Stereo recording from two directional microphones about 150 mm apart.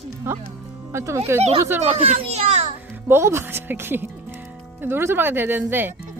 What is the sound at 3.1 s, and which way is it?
Speech, 15° right (ahead or behind).